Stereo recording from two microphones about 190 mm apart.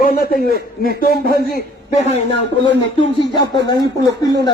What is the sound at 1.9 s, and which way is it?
Speech, 35° left (ahead or behind).